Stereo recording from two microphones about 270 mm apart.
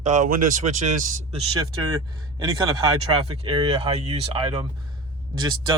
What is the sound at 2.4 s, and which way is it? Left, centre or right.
Speech, centre.